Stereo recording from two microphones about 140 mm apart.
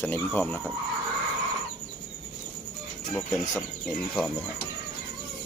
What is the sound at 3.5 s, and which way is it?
Speech, 20° left (ahead or behind).